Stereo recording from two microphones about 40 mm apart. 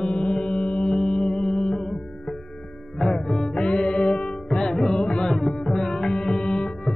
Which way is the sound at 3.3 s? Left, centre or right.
Centre.